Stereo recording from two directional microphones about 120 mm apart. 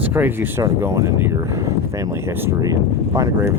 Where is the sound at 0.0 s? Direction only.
15° right (ahead or behind).